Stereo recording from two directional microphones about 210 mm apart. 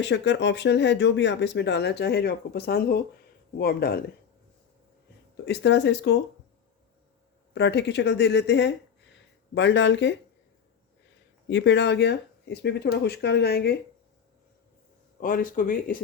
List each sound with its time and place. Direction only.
0.0 s speech: 55° left (ahead or behind)
5.5 s speech: 55° left (ahead or behind)
7.5 s speech: 55° left (ahead or behind)
11.4 s speech: 55° left (ahead or behind)
15.2 s speech: 40° left (ahead or behind)